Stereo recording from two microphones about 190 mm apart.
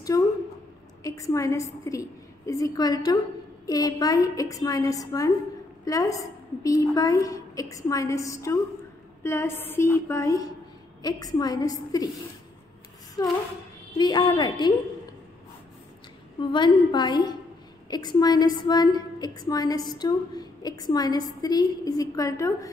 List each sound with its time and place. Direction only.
0.1 s a sound: 15° left (ahead or behind)
1.0 s a woman's voice: 15° left (ahead or behind)
13.2 s a woman's voice: 20° left (ahead or behind)
16.3 s a woman's voice: 25° left (ahead or behind)